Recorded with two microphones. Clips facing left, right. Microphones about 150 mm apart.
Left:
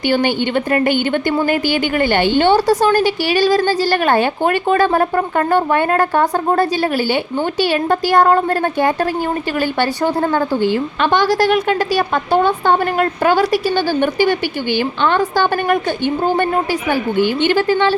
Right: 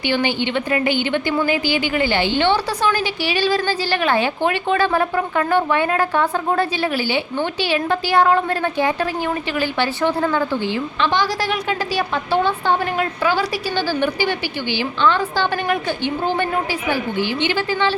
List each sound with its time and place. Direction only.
0.1 s a woman's voice: 45° left (ahead or behind)